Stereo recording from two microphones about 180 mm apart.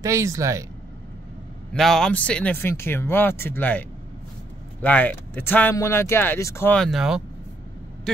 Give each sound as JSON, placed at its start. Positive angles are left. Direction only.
{"t": 0.0, "sound": "speech", "side_deg": -15}
{"t": 1.7, "sound": "speech", "side_deg": 5}
{"t": 4.8, "sound": "speech", "side_deg": 10}